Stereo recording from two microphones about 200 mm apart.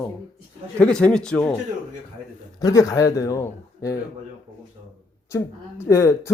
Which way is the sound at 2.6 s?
15° left (ahead or behind).